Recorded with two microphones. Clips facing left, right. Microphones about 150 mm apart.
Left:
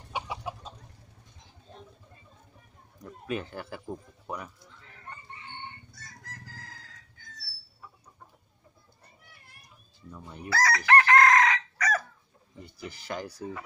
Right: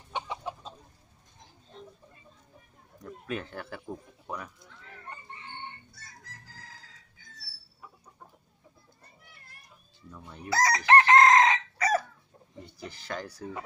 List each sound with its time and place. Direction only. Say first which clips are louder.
0.1 s chicken: even; 10° left (ahead or behind)
3.0 s speech: left 2 dB; 5° left (ahead or behind)
10.1 s chicken: left 2 dB; 10° left (ahead or behind)
10.5 s chicken: right 1 dB; 20° right (ahead or behind)
12.6 s speech: left 2 dB; 10° left (ahead or behind)